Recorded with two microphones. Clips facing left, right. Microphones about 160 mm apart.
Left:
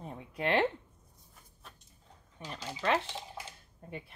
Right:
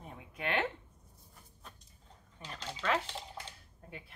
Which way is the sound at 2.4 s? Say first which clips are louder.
Left 3 dB; 10° left (ahead or behind).